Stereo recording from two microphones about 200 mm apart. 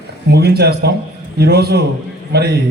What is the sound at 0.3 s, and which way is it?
A man's voice, 55° right (ahead or behind).